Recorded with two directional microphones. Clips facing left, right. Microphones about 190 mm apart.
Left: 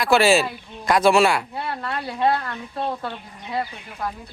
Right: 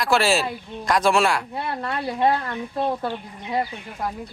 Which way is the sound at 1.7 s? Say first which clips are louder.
Right 4 dB; 20° right (ahead or behind).